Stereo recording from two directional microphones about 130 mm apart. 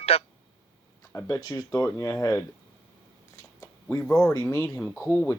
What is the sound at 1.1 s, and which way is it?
Speech, 30° left (ahead or behind).